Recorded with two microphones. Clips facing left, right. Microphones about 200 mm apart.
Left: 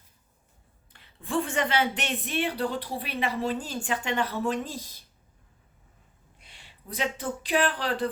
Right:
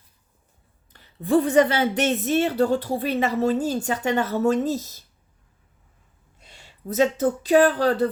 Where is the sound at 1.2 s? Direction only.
40° right (ahead or behind).